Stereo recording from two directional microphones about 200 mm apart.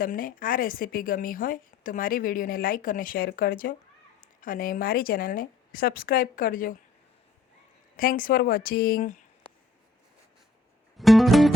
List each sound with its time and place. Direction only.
0.0 s a woman's voice: 45° left (ahead or behind)
7.9 s a woman's voice: 45° left (ahead or behind)
10.9 s music: centre (ahead or behind)